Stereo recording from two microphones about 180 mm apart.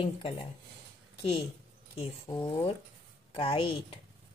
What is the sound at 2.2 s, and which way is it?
A woman's voice, 30° left (ahead or behind).